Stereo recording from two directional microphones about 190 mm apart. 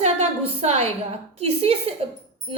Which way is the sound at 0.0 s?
35° right (ahead or behind).